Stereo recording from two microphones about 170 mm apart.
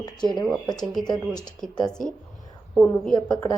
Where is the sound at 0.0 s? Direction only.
25° left (ahead or behind).